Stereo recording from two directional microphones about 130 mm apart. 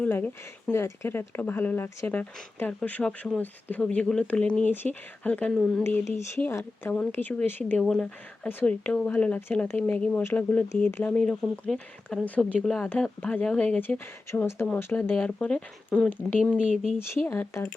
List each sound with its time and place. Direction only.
0.0 s speech: 15° left (ahead or behind)
5.8 s speech: 20° left (ahead or behind); by 17.0 s 5° left (ahead or behind)
17.2 s speech: 15° left (ahead or behind)